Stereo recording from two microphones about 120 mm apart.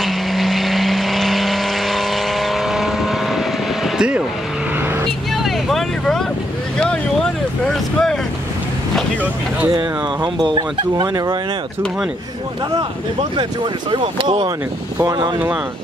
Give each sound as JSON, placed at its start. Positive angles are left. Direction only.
{"t": 0.0, "sound": "vehicle", "side_deg": 0}
{"t": 5.3, "sound": "vehicle", "side_deg": 0}
{"t": 9.7, "sound": "speech", "side_deg": -40}
{"t": 13.4, "sound": "speech", "side_deg": -40}